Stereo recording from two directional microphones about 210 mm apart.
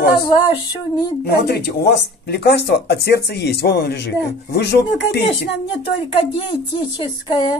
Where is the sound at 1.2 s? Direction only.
50° left (ahead or behind).